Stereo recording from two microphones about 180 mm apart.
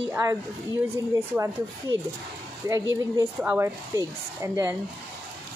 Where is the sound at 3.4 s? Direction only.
15° right (ahead or behind).